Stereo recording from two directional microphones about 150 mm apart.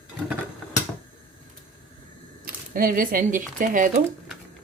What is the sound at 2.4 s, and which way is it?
Speech, 75° right (ahead or behind).